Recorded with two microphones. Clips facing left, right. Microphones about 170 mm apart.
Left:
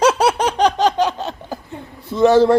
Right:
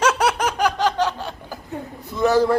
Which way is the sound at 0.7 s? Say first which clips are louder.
Left 4 dB; 15° left (ahead or behind).